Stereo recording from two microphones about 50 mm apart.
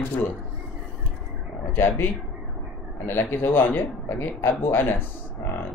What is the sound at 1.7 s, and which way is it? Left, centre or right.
Speech, left.